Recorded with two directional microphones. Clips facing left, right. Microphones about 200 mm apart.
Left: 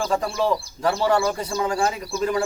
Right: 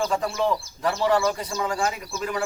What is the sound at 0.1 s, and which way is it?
A man's voice, 30° left (ahead or behind).